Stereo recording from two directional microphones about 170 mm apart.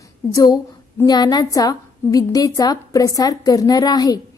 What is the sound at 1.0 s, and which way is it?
A woman's voice, 25° left (ahead or behind).